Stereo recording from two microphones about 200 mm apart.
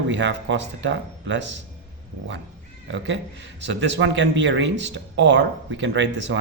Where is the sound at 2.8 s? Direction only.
60° right (ahead or behind).